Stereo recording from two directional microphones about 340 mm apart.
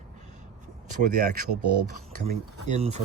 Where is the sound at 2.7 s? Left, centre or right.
Centre.